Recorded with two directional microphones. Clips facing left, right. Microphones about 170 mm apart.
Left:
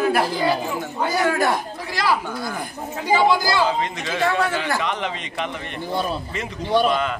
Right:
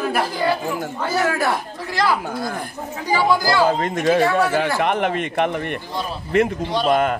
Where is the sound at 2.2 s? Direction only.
50° right (ahead or behind).